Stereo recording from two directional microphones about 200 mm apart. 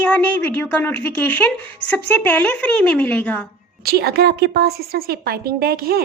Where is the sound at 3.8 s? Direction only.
50° right (ahead or behind).